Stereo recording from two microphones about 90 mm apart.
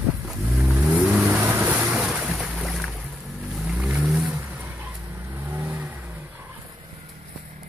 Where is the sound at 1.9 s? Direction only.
5° right (ahead or behind).